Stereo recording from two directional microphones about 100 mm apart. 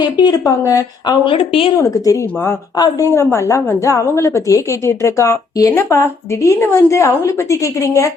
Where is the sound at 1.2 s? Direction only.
65° left (ahead or behind).